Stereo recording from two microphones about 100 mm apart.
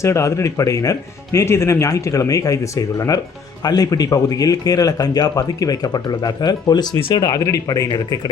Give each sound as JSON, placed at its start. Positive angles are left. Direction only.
{"t": 0.0, "sound": "speech", "side_deg": 30}